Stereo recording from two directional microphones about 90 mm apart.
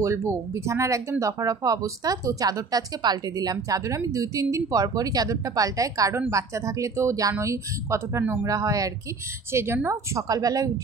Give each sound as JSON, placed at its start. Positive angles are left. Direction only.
{"t": 0.0, "sound": "speech", "side_deg": -35}
{"t": 9.5, "sound": "a woman's voice", "side_deg": -30}
{"t": 9.8, "sound": "speech", "side_deg": -40}